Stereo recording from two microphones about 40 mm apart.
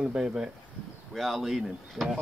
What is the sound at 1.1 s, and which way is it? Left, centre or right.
Speech, centre.